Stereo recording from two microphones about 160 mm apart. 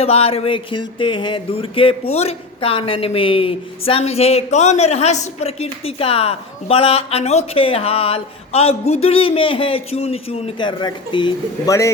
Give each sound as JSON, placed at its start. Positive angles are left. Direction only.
{"t": 0.0, "sound": "speech", "side_deg": 40}